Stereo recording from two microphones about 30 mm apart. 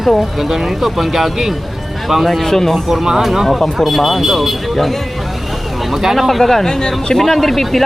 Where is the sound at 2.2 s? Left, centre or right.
Centre.